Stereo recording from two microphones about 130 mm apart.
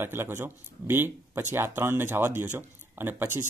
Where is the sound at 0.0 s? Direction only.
15° right (ahead or behind).